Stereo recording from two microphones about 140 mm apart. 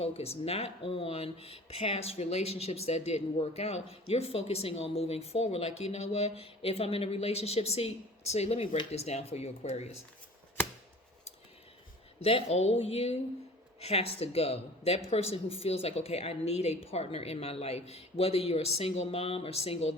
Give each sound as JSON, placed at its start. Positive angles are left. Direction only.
{"t": 0.0, "sound": "speech", "side_deg": 45}
{"t": 12.2, "sound": "speech", "side_deg": 45}